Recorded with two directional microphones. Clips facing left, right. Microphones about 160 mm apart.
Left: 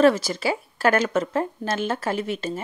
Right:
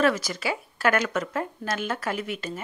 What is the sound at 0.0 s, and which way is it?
A woman's voice, 30° left (ahead or behind).